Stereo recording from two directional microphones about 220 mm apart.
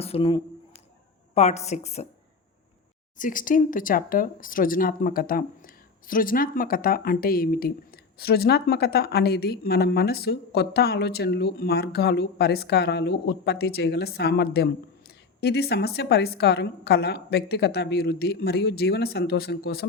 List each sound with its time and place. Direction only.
0.0 s a man's voice: 25° left (ahead or behind)
3.2 s a woman's voice: 35° left (ahead or behind)